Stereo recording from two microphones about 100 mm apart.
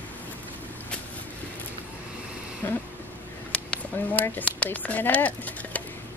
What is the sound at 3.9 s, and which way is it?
Speech, 20° left (ahead or behind).